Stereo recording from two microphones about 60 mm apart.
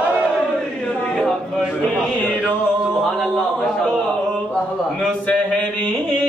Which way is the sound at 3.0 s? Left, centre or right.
Centre.